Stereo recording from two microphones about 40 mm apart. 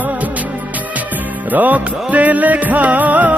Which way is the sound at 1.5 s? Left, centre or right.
Right.